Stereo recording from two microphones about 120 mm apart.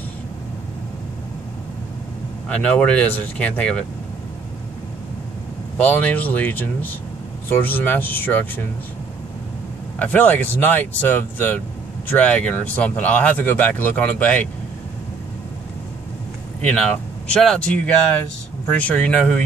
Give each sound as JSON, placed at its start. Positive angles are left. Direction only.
{"t": 2.4, "sound": "speech", "side_deg": 10}
{"t": 5.8, "sound": "speech", "side_deg": 15}
{"t": 9.9, "sound": "speech", "side_deg": 15}
{"t": 16.6, "sound": "speech", "side_deg": 5}